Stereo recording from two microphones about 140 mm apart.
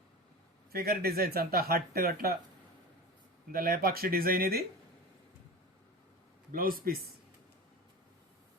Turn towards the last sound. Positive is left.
turn(degrees=-90)